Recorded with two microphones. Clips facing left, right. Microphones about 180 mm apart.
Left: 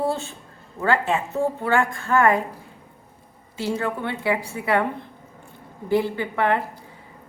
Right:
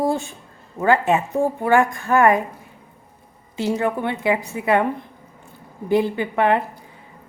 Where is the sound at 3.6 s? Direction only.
20° right (ahead or behind).